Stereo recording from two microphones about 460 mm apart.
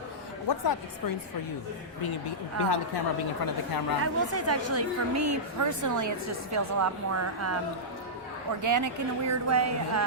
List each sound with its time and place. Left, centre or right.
0.4 s speech: left
2.6 s a woman's voice: left
4.0 s a woman's voice: right
8.6 s a woman's voice: right